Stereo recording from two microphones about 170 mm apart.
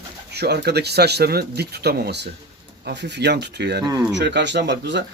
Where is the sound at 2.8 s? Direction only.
90° right.